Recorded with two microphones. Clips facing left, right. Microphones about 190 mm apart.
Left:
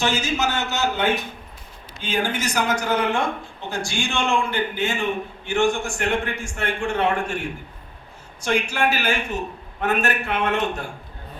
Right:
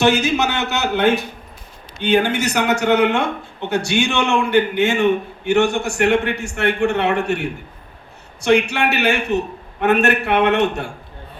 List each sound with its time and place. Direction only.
0.0 s a man's voice: 65° right (ahead or behind)